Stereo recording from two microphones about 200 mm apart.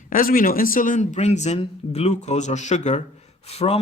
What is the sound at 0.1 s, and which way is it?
Speech, 45° left (ahead or behind).